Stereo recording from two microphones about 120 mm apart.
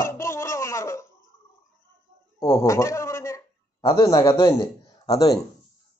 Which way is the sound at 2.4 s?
25° left (ahead or behind).